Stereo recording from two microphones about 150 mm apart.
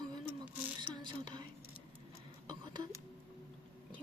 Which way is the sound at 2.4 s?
30° right (ahead or behind).